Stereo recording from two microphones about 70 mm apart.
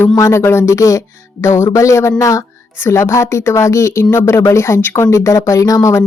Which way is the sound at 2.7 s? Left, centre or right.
Left.